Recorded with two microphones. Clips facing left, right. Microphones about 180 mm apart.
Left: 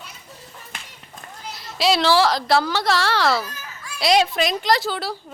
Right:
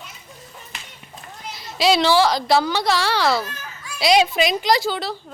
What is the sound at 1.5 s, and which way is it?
A woman's voice, centre (ahead or behind).